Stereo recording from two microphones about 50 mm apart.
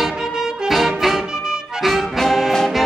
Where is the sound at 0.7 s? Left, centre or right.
Centre.